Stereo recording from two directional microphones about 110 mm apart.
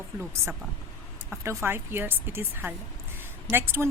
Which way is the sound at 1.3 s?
20° right (ahead or behind).